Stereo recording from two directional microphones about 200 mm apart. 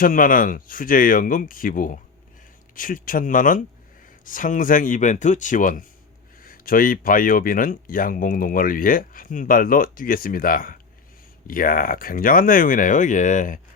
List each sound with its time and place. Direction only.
0.0 s speech: 45° left (ahead or behind)